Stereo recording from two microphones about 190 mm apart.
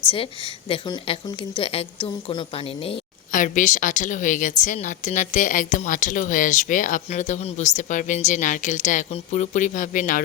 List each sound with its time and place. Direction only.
0.7 s speech: 30° left (ahead or behind)
3.3 s a woman's voice: 45° left (ahead or behind)